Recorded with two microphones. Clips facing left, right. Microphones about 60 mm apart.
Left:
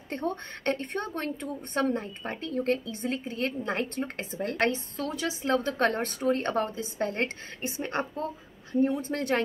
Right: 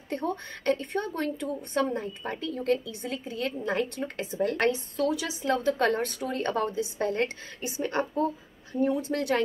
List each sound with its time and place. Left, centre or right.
0.1 s a woman's voice: left